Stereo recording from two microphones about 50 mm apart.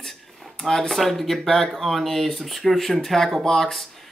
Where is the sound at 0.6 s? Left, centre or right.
Centre.